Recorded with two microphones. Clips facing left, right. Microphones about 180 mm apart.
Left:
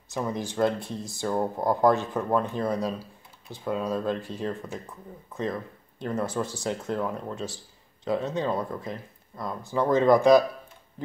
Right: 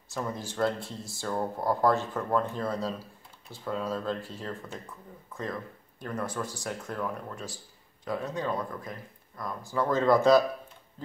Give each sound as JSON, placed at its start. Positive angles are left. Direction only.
{"t": 0.1, "sound": "speech", "side_deg": 20}